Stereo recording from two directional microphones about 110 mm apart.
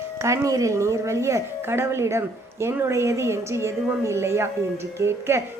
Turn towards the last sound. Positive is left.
turn(degrees=-25)  # may be behind; listen again after turning